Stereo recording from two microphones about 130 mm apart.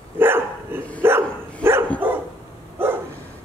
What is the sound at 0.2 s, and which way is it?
Dog, 15° right (ahead or behind).